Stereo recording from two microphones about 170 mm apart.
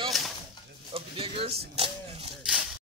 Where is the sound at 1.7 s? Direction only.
35° right (ahead or behind).